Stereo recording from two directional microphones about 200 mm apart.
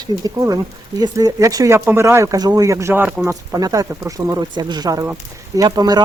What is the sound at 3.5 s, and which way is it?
Speech, 20° right (ahead or behind).